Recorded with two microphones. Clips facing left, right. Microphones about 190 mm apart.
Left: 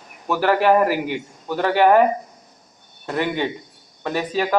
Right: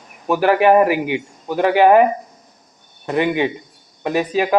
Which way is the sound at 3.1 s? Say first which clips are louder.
Right 5 dB; 15° right (ahead or behind).